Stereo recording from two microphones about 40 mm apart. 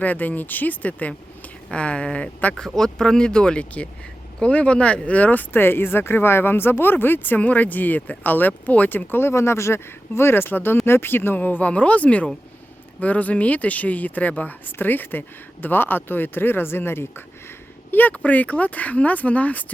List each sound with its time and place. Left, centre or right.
0.0 s speech: left
1.7 s speech: left
2.6 s speech: centre; by 7.3 s left
7.3 s speech: left
9.0 s speech: left
11.3 s speech: left
17.9 s speech: left